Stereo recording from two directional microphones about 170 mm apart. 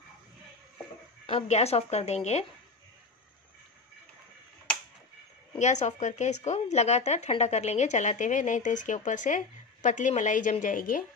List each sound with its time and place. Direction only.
1.2 s a woman's voice: 40° left (ahead or behind)
5.6 s speech: 45° left (ahead or behind)